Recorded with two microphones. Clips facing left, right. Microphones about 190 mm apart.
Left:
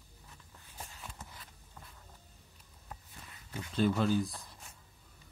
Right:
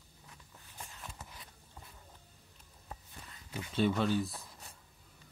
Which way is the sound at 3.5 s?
5° right (ahead or behind).